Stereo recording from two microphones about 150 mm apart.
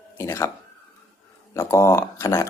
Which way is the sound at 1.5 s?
20° left (ahead or behind).